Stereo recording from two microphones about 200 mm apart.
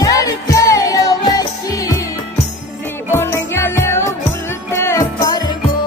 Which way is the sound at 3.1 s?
10° left (ahead or behind).